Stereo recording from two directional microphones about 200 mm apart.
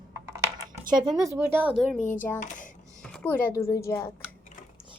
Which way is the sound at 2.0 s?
40° left (ahead or behind).